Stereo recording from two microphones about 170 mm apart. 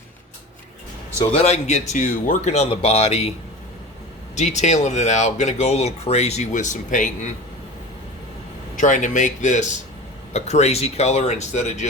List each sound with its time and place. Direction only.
1.3 s speech: 35° left (ahead or behind)
4.4 s speech: 45° left (ahead or behind)
8.7 s speech: 50° left (ahead or behind)